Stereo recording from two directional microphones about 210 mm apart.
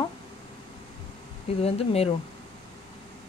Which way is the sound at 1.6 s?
30° left (ahead or behind).